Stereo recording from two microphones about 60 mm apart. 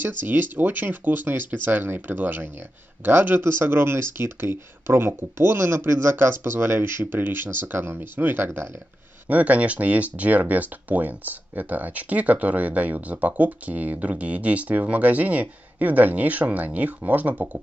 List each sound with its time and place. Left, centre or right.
0.0 s speech: right